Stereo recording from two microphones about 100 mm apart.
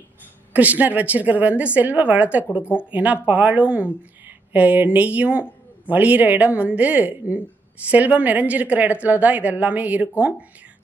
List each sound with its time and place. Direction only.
0.5 s a woman's voice: 15° right (ahead or behind)